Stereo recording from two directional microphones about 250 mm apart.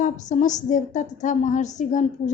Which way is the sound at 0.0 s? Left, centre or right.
Left.